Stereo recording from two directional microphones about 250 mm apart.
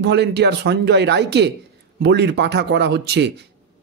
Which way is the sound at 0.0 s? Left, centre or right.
Right.